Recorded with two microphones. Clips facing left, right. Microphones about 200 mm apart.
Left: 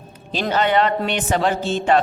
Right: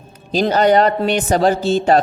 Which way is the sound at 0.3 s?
40° right (ahead or behind).